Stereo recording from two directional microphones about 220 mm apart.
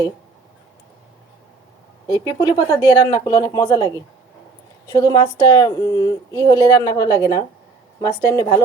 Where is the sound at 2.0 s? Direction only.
20° left (ahead or behind).